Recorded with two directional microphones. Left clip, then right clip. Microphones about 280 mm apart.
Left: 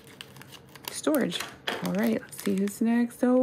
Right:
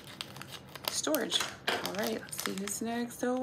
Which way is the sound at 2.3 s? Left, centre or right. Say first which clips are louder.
Left 7 dB; centre.